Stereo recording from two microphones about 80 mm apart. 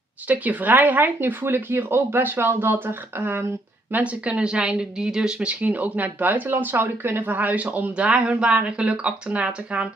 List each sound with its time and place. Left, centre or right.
0.3 s speech: right